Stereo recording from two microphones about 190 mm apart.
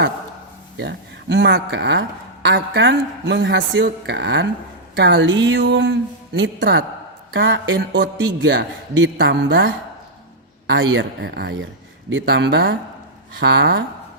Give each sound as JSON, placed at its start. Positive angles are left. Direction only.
{"t": 0.8, "sound": "a woman's voice", "side_deg": -65}